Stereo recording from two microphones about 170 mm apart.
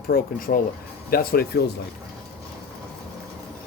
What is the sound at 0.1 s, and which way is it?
Speech, 55° left (ahead or behind).